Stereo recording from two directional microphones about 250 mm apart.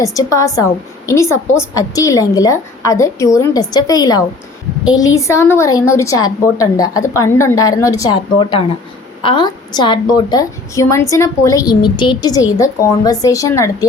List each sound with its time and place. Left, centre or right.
0.0 s a woman's voice: centre